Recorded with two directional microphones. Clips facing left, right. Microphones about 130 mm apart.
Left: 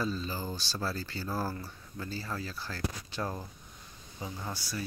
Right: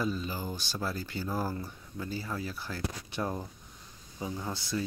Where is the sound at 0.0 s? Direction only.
15° right (ahead or behind).